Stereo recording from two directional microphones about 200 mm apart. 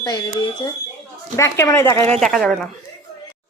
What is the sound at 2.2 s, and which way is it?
Speech, centre (ahead or behind).